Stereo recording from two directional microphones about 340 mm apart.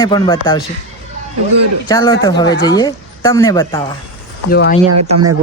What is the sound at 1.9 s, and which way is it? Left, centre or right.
Speech, centre.